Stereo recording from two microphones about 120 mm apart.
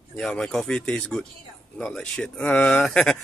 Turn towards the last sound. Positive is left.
turn(degrees=5)  # may be behind; listen again after turning